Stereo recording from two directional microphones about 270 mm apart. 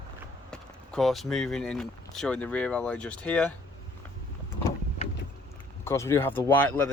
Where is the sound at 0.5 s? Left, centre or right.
Centre.